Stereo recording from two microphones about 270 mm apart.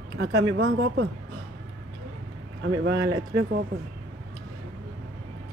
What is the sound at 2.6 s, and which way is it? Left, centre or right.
Speech, right.